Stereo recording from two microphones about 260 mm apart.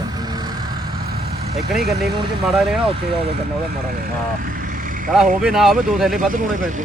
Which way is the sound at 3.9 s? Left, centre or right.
Right.